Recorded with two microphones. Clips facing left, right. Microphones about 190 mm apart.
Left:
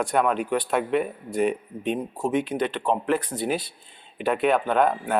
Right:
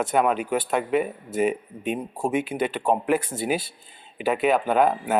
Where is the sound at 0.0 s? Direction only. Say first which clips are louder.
Right 1 dB; 5° right (ahead or behind).